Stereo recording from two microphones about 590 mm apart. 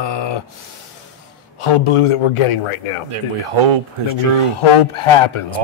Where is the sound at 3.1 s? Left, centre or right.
Right.